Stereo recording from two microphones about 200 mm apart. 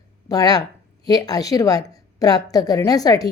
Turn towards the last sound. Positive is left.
turn(degrees=20)  # may be behind; listen again after turning